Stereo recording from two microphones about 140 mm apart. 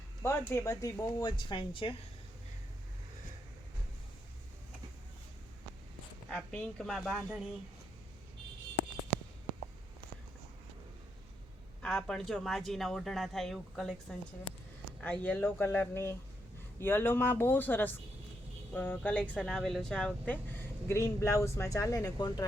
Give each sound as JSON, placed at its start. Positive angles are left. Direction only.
{"t": 0.2, "sound": "speech", "side_deg": 20}
{"t": 6.3, "sound": "speech", "side_deg": 5}
{"t": 11.8, "sound": "speech", "side_deg": 5}